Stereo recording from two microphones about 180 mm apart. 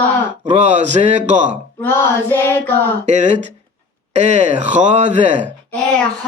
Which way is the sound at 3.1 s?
40° right (ahead or behind).